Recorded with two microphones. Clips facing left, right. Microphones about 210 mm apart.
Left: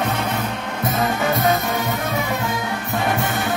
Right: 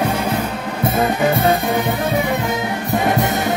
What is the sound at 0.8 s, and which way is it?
Music, 30° right (ahead or behind).